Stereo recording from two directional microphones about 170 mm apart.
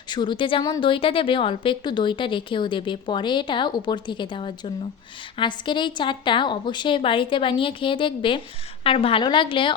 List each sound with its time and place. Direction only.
0.1 s a woman's voice: 25° left (ahead or behind)